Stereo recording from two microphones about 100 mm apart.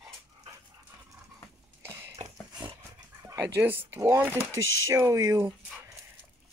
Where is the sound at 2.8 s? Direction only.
30° right (ahead or behind).